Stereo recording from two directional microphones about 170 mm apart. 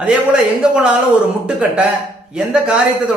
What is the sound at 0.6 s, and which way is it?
Speech, 5° right (ahead or behind).